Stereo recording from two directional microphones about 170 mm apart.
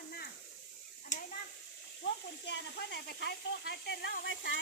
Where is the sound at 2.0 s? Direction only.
90° left.